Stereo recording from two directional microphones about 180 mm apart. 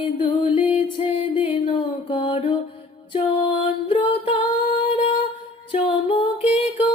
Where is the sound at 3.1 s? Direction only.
30° left (ahead or behind).